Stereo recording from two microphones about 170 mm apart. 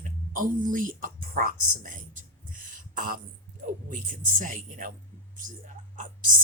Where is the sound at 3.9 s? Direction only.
50° right (ahead or behind).